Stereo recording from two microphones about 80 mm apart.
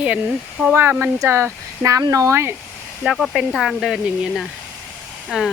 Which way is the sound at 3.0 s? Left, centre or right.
Centre.